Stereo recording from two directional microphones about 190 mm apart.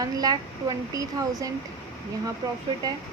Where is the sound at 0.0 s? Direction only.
20° right (ahead or behind).